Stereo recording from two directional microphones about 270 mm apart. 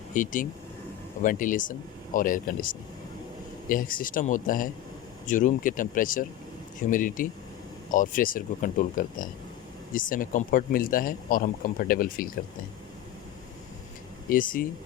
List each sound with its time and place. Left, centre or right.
0.1 s a man's voice: left
14.3 s a man's voice: left